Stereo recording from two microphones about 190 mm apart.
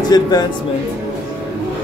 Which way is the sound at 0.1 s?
20° left (ahead or behind).